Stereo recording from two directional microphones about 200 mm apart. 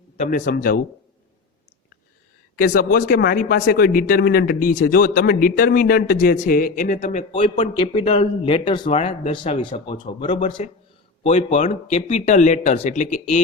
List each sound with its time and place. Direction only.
0.2 s speech: 40° left (ahead or behind)
2.6 s speech: 45° left (ahead or behind)